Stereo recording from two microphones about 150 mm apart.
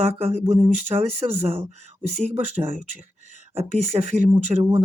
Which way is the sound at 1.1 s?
15° right (ahead or behind).